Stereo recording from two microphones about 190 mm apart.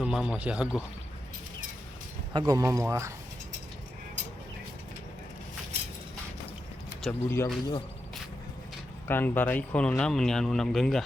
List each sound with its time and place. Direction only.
0.0 s speech: 5° right (ahead or behind)
2.3 s speech: 20° right (ahead or behind)
7.0 s speech: 10° left (ahead or behind)
9.0 s speech: 10° left (ahead or behind)